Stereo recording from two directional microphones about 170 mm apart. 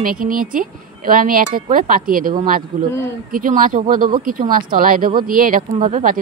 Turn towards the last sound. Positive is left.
turn(degrees=-50)  # may be behind; listen again after turning